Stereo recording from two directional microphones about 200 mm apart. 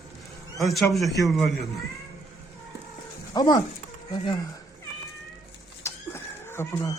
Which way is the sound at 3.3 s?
20° left (ahead or behind).